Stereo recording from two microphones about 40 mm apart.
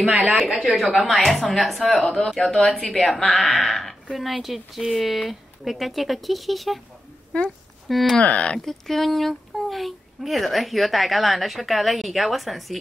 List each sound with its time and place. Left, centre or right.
0.1 s speech: right
0.7 s speech: centre
4.1 s speech: centre
7.3 s speech: left
7.9 s speech: centre
8.2 s speech: left
8.5 s speech: centre